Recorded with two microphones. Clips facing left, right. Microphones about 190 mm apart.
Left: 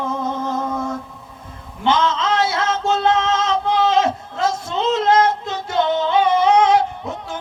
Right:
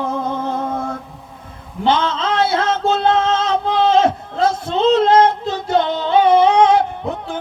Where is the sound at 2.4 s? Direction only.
55° right (ahead or behind).